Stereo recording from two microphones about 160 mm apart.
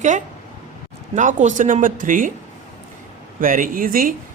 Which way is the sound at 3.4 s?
60° right (ahead or behind).